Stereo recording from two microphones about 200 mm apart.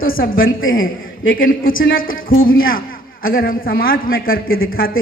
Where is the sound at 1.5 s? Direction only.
45° left (ahead or behind).